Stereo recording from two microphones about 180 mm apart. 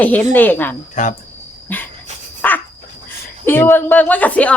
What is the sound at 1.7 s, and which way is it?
Speech, 10° left (ahead or behind).